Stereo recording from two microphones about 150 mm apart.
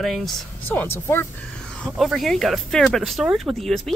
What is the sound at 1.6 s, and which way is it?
Speech, 5° left (ahead or behind).